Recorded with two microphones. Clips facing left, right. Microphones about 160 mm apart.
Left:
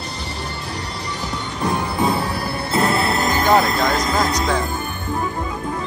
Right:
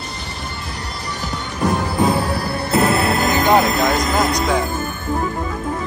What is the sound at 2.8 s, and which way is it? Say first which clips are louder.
Music: right 1 dB; 5° right (ahead or behind).